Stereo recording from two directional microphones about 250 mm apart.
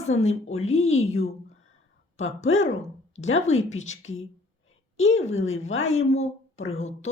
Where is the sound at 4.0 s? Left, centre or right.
Left.